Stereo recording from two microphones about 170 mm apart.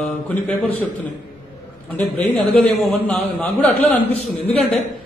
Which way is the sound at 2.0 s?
10° left (ahead or behind).